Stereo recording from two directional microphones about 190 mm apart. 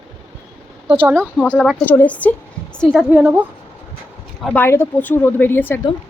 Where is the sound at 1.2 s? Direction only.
10° right (ahead or behind).